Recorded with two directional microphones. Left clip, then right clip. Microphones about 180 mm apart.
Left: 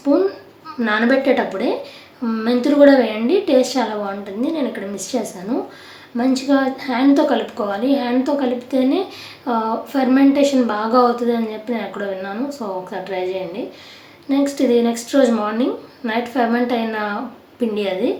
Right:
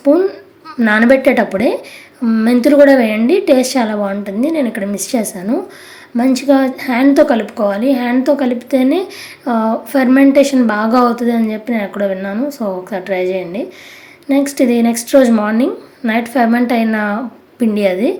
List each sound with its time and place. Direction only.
0.0 s a sound: 25° right (ahead or behind)
0.8 s a woman's voice: 35° right (ahead or behind)
14.3 s a woman's voice: 35° right (ahead or behind)